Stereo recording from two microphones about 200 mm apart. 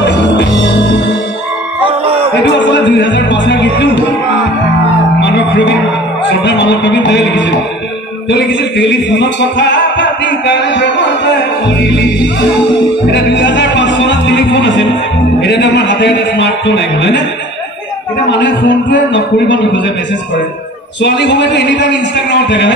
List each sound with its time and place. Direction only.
0.0 s music: 60° left (ahead or behind)
1.8 s a sound: 30° right (ahead or behind)
2.5 s music: 60° left (ahead or behind)
5.2 s music: 60° left (ahead or behind)
6.4 s a man's voice: 60° left (ahead or behind)
8.3 s music: 60° left (ahead or behind)
15.4 s a man's voice: 60° left (ahead or behind)
18.3 s a man's voice: 65° left (ahead or behind)
21.0 s a man's voice: 60° left (ahead or behind)